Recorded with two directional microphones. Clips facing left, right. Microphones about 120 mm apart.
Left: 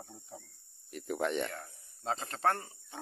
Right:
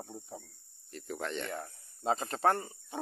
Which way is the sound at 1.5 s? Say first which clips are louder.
Right 5 dB; 15° right (ahead or behind).